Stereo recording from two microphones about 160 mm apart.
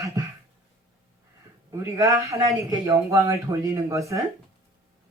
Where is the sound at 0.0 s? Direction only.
20° right (ahead or behind).